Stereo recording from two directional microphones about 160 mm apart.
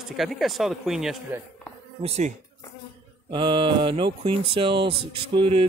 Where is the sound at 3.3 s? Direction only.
30° right (ahead or behind).